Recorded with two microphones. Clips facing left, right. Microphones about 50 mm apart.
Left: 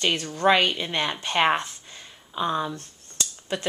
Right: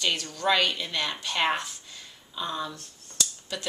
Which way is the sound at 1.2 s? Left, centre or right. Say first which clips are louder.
Left 5 dB; left.